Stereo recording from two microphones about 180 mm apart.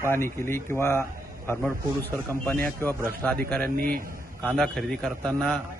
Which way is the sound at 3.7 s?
55° right (ahead or behind).